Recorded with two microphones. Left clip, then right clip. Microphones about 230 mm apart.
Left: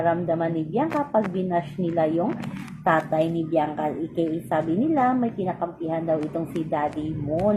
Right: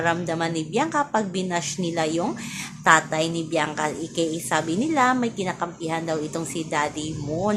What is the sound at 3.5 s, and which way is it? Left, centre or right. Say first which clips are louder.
A woman's voice: even; right.